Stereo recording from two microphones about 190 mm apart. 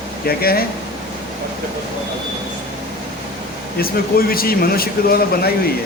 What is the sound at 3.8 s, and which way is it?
Speech, 50° left (ahead or behind).